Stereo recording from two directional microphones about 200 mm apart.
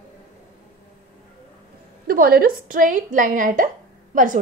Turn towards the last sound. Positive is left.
turn(degrees=-40)  # may be behind; listen again after turning